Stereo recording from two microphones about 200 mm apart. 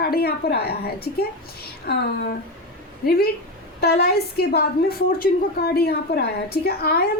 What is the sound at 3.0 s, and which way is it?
A woman's voice, 50° left (ahead or behind).